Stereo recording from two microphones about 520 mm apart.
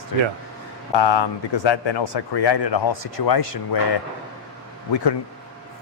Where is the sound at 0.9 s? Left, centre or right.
Left.